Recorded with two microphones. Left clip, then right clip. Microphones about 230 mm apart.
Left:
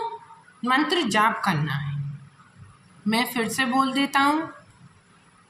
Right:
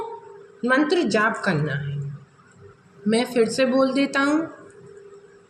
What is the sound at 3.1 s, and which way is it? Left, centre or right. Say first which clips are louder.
A woman's voice: right 4 dB; left.